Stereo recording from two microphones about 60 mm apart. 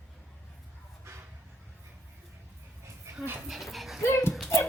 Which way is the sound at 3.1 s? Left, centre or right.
Right.